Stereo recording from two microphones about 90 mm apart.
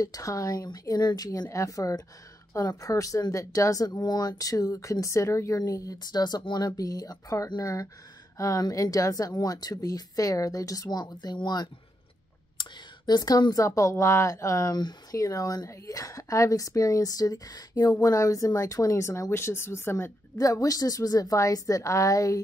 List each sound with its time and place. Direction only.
0.0 s a woman's voice: 40° left (ahead or behind)
20.3 s a woman's voice: 40° left (ahead or behind)